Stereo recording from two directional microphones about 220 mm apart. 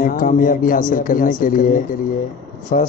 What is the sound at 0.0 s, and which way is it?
A man's voice, 40° left (ahead or behind).